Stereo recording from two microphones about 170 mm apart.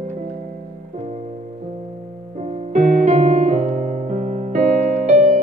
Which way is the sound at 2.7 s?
45° right (ahead or behind).